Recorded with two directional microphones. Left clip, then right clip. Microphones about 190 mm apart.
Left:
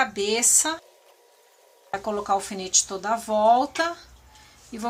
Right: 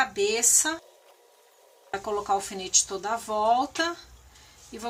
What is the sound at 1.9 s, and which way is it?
Speech, 25° left (ahead or behind).